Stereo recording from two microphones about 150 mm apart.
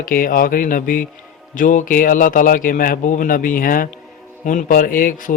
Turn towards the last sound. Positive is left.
turn(degrees=65)  # may be behind; listen again after turning